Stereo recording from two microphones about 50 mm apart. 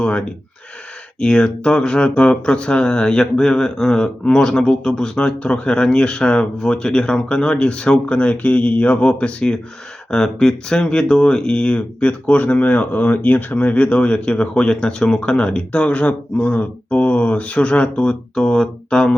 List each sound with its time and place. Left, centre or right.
0.0 s speech: left
10.1 s speech: centre